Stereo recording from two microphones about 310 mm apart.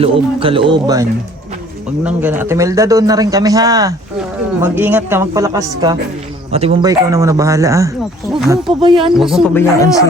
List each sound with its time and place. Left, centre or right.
0.0 s a man's voice: centre
2.0 s a man's voice: centre
8.8 s a man's voice: centre
9.1 s speech: centre
9.7 s speech: centre